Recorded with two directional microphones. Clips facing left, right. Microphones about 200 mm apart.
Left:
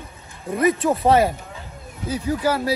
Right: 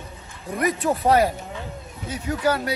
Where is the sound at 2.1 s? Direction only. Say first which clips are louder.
Left 2 dB; 30° left (ahead or behind).